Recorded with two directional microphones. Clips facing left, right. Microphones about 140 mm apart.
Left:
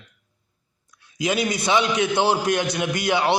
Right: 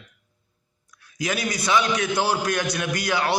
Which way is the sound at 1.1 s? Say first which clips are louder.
Left 4 dB; 20° left (ahead or behind).